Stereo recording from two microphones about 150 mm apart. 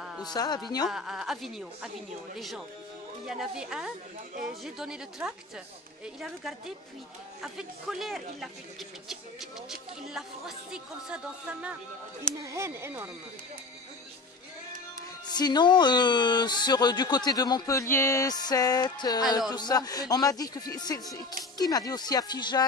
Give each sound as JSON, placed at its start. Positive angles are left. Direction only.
{"t": 0.2, "sound": "speech", "side_deg": 25}
{"t": 0.8, "sound": "speech", "side_deg": -5}
{"t": 12.4, "sound": "speech", "side_deg": -20}
{"t": 15.0, "sound": "speech", "side_deg": 25}